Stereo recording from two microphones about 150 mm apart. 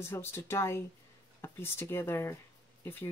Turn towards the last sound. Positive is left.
turn(degrees=15)  # may be behind; listen again after turning